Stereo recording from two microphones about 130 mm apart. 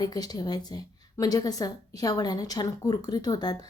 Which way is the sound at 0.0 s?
30° left (ahead or behind).